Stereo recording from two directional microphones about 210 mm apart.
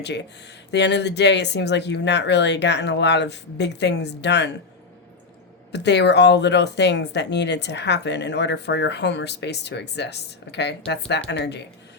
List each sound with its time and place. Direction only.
0.0 s speech: 55° left (ahead or behind)
5.7 s speech: 55° left (ahead or behind)